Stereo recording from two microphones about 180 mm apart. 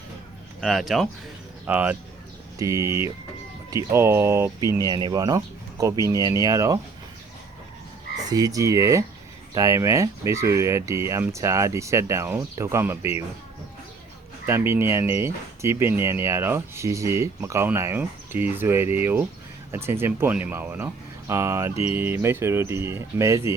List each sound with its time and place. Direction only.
0.6 s speech: centre (ahead or behind); by 6.7 s 20° right (ahead or behind)
8.3 s speech: 20° right (ahead or behind)
14.4 s speech: 15° right (ahead or behind)